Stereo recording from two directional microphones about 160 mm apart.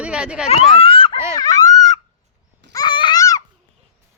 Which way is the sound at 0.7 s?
35° left (ahead or behind).